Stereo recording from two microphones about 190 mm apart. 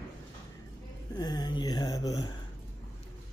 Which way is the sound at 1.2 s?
20° left (ahead or behind).